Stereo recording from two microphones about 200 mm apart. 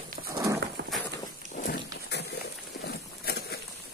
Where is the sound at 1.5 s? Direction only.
45° left (ahead or behind).